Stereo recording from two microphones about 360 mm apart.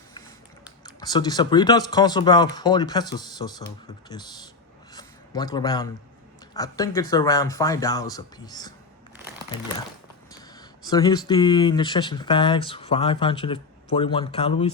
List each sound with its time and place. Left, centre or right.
0.9 s speech: centre
4.9 s a sound: centre
6.5 s speech: centre
10.8 s speech: centre